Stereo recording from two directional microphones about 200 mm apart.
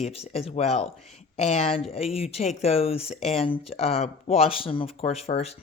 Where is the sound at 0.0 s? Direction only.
30° left (ahead or behind).